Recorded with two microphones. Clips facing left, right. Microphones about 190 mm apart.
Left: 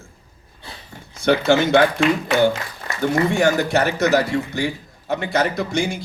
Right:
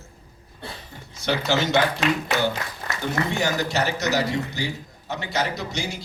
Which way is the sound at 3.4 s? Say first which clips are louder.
Left 6 dB; 55° left (ahead or behind).